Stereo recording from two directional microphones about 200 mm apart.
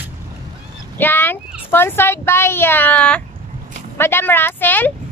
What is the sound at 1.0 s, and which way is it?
Speech, 10° left (ahead or behind).